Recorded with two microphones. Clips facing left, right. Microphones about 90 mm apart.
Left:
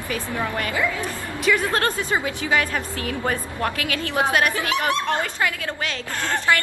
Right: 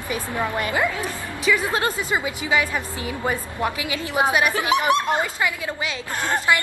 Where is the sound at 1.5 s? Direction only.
10° right (ahead or behind).